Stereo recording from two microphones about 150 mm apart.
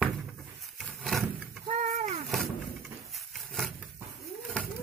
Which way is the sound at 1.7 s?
50° right (ahead or behind).